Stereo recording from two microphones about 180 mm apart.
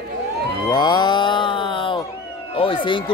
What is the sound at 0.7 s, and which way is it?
Music, 25° left (ahead or behind).